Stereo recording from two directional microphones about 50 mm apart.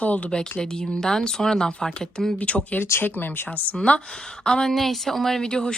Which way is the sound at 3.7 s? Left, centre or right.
Centre.